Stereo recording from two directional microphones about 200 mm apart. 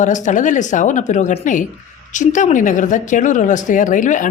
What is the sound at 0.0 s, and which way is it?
Speech, 40° left (ahead or behind).